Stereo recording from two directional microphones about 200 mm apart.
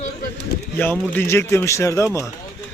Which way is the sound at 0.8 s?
10° left (ahead or behind).